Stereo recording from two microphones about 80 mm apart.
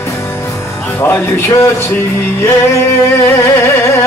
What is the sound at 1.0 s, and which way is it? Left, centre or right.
Speech, left.